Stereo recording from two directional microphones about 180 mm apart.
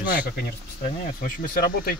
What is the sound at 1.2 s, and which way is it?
Speech, 50° left (ahead or behind).